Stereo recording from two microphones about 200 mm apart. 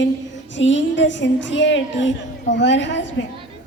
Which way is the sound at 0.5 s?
65° left (ahead or behind).